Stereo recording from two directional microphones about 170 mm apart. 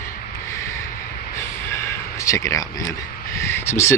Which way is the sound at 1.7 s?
15° left (ahead or behind).